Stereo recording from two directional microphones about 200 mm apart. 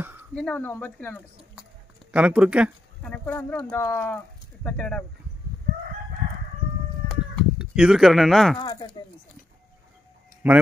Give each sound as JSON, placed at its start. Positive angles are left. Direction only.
{"t": 0.0, "sound": "a sound", "side_deg": -10}
{"t": 0.3, "sound": "speech", "side_deg": 5}
{"t": 2.1, "sound": "speech", "side_deg": -5}
{"t": 3.0, "sound": "speech", "side_deg": 5}
{"t": 7.1, "sound": "livestock", "side_deg": -5}
{"t": 8.5, "sound": "speech", "side_deg": 20}
{"t": 10.4, "sound": "speech", "side_deg": -10}